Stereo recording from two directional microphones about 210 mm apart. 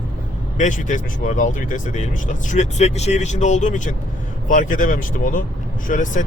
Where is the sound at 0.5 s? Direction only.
35° left (ahead or behind).